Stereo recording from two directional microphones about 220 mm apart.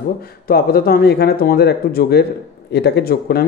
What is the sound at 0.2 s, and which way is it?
Speech, 45° left (ahead or behind).